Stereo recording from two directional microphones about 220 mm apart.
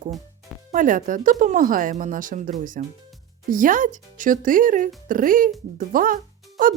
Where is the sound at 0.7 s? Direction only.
35° right (ahead or behind).